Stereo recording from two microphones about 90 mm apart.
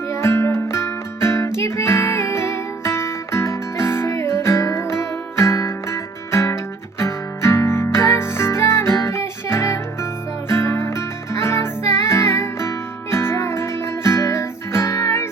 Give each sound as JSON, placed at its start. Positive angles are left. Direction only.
{"t": 0.1, "sound": "music", "side_deg": 30}